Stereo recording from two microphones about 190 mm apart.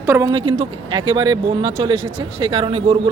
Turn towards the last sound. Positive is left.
turn(degrees=-30)  # may be behind; listen again after turning